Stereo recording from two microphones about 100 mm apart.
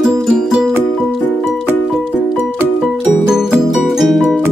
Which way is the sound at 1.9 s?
5° right (ahead or behind).